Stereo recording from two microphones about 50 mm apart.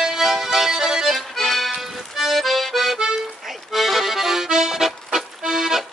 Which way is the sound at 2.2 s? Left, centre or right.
Centre.